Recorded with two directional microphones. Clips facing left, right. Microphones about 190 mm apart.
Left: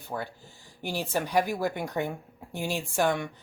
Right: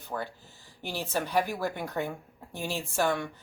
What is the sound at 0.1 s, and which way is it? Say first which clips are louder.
Speech: left 1 dB; 15° left (ahead or behind).